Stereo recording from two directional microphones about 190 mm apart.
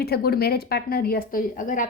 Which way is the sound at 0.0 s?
55° left (ahead or behind).